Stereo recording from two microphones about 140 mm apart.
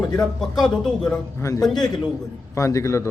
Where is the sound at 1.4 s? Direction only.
20° left (ahead or behind).